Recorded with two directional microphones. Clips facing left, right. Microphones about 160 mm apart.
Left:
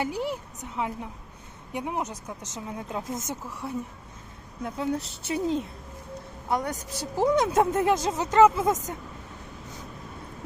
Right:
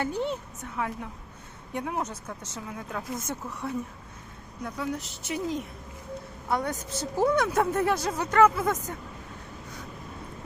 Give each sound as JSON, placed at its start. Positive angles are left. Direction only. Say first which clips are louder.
{"t": 0.0, "sound": "a woman's voice", "louder": "even", "side_deg": 10}
{"t": 4.6, "sound": "a woman's voice", "louder": "left 3 dB", "side_deg": 25}
{"t": 6.5, "sound": "a woman's voice", "louder": "even", "side_deg": 15}